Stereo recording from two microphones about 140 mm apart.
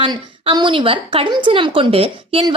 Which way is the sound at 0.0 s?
35° right (ahead or behind).